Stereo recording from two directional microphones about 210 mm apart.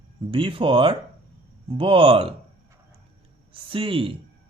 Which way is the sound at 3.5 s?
25° right (ahead or behind).